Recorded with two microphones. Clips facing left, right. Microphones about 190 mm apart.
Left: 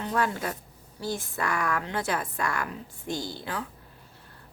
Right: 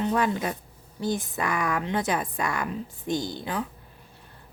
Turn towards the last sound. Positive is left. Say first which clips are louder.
# right 4 dB
turn(degrees=-20)  # may be behind; listen again after turning